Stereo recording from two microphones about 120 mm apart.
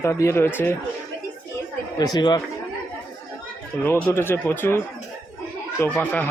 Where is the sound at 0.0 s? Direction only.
25° left (ahead or behind).